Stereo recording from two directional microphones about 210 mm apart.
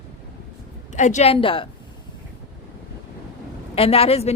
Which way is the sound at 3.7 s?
25° left (ahead or behind).